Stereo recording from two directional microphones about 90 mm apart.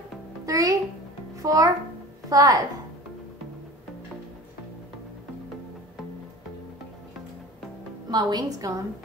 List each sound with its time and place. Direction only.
0.5 s music: 40° right (ahead or behind)
1.3 s a child's voice: 40° right (ahead or behind)
8.1 s a woman's voice: 50° right (ahead or behind)